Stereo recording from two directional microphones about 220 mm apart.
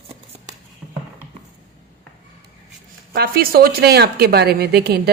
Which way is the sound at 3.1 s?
45° right (ahead or behind).